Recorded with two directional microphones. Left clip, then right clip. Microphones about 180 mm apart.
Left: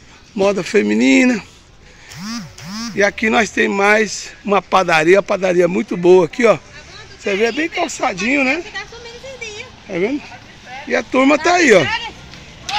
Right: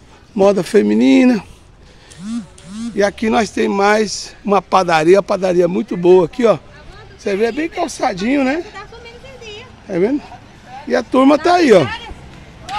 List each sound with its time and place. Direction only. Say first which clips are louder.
0.4 s speech: right 3 dB; 25° right (ahead or behind)
3.0 s speech: left 1 dB; 15° right (ahead or behind)
7.8 s speech: right 3 dB; 15° right (ahead or behind)
9.8 s speech: right 3 dB; 30° right (ahead or behind)